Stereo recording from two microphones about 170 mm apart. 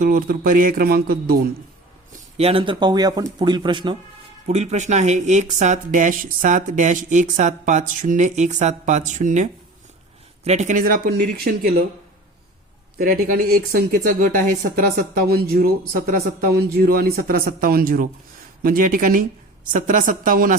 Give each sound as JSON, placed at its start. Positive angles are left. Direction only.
{"t": 0.0, "sound": "speech", "side_deg": -50}
{"t": 2.4, "sound": "speech", "side_deg": -30}
{"t": 4.4, "sound": "speech", "side_deg": -40}
{"t": 13.0, "sound": "speech", "side_deg": -60}